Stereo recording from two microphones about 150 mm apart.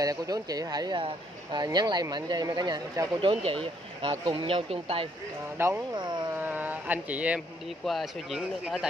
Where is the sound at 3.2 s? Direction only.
35° right (ahead or behind).